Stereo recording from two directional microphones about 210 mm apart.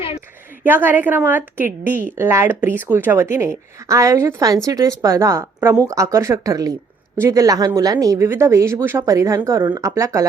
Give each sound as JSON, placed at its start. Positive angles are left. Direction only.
{"t": 0.6, "sound": "a woman's voice", "side_deg": -10}